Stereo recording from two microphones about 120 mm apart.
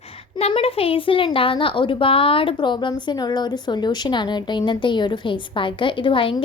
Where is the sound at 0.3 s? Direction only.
55° left (ahead or behind).